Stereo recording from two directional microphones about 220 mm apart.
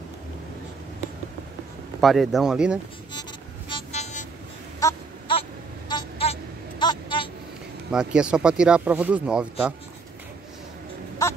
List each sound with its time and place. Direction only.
2.0 s speech: centre (ahead or behind)
3.1 s vehicle: 20° left (ahead or behind)
4.7 s a sound: 15° left (ahead or behind)
5.9 s vehicle: 20° left (ahead or behind)
6.8 s a sound: 20° left (ahead or behind)
7.9 s speech: 5° right (ahead or behind)